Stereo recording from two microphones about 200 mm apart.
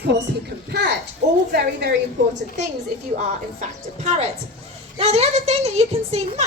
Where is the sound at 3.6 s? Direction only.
35° right (ahead or behind).